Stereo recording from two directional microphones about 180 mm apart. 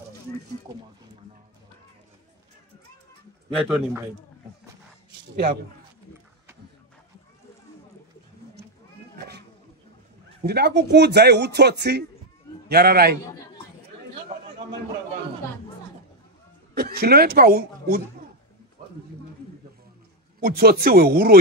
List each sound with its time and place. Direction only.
3.5 s a man's voice: 10° right (ahead or behind)
5.3 s a man's voice: 50° right (ahead or behind)
10.4 s speech: 65° right (ahead or behind)
16.7 s speech: 60° right (ahead or behind)
20.3 s speech: 55° right (ahead or behind)